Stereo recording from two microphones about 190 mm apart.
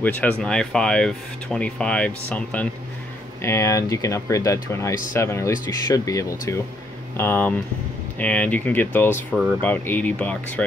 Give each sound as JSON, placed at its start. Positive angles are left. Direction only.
{"t": 0.0, "sound": "speech", "side_deg": 10}